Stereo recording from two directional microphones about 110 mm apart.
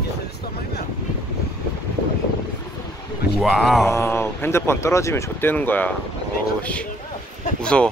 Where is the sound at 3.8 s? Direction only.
25° left (ahead or behind).